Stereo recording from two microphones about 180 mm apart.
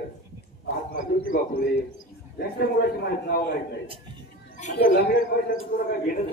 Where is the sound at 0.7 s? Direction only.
55° left (ahead or behind).